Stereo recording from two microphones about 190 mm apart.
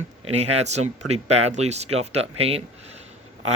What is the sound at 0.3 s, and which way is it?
Speech, 35° right (ahead or behind).